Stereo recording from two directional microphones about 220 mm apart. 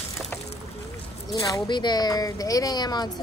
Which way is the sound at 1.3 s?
20° left (ahead or behind).